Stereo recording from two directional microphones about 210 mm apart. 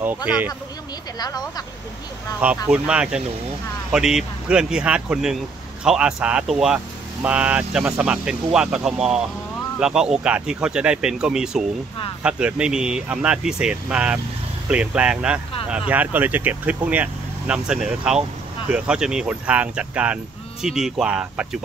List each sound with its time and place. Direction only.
0.0 s speech: 5° right (ahead or behind)
1.2 s speech: 20° left (ahead or behind)
2.4 s speech: 5° right (ahead or behind)